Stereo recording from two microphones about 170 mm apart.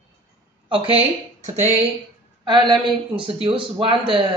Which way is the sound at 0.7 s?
30° right (ahead or behind).